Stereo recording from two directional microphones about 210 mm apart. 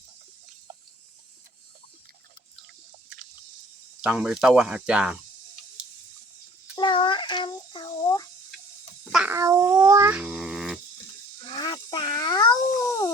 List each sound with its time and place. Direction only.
4.0 s speech: 5° right (ahead or behind)
6.7 s a sound: 25° left (ahead or behind)
9.1 s babbling: 10° right (ahead or behind)
11.4 s dog: 20° left (ahead or behind)